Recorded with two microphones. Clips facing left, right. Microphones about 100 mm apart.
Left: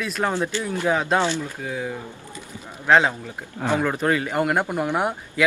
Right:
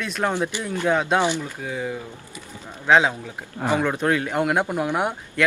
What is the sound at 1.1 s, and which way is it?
Speech, 15° right (ahead or behind).